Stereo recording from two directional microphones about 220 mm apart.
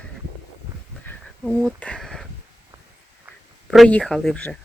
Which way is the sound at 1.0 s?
Centre (ahead or behind).